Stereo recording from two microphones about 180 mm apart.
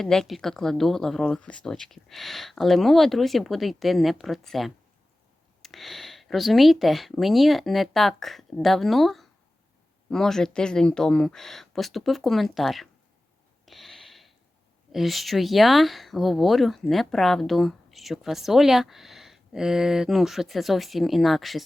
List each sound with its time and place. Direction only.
0.0 s speech: 5° left (ahead or behind)
13.7 s a sound: centre (ahead or behind)
14.9 s speech: centre (ahead or behind)